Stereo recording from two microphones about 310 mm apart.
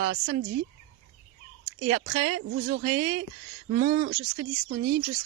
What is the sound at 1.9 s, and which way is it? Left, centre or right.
Speech, right.